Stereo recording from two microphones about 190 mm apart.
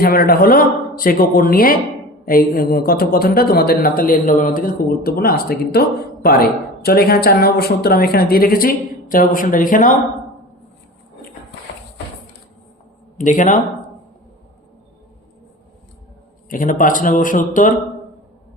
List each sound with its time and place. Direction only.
0.0 s speech: 50° left (ahead or behind)
6.8 s speech: 55° left (ahead or behind)
13.1 s speech: 40° left (ahead or behind)
16.5 s speech: 45° left (ahead or behind)